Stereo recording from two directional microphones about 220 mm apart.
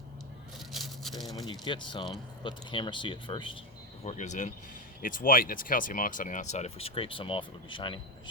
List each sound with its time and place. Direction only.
0.7 s a sound: centre (ahead or behind)
1.5 s speech: 20° left (ahead or behind)
4.0 s speech: 35° left (ahead or behind)